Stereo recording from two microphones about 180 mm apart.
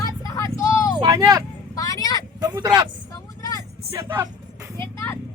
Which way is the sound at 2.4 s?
20° right (ahead or behind).